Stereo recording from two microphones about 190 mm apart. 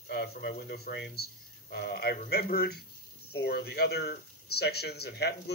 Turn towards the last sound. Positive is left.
turn(degrees=60)  # may be behind; listen again after turning